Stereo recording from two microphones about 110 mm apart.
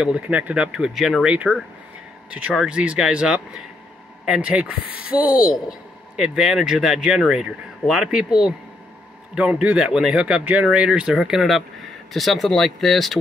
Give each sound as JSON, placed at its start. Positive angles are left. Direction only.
{"t": 0.0, "sound": "speech", "side_deg": -10}